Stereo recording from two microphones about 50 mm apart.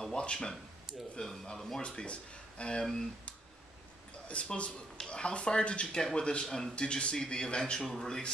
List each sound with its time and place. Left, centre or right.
0.0 s speech: centre
1.8 s speech: left
4.3 s speech: left